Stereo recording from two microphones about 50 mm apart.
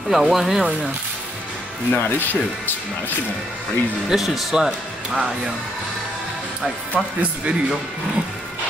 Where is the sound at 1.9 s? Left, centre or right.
Left.